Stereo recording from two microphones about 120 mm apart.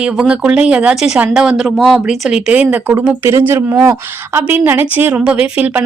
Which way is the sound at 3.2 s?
20° right (ahead or behind).